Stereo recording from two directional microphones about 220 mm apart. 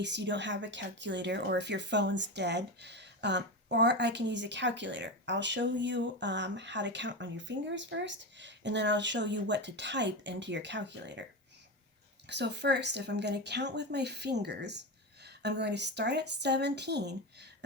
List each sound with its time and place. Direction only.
0.0 s speech: 50° right (ahead or behind)
12.3 s speech: 50° right (ahead or behind)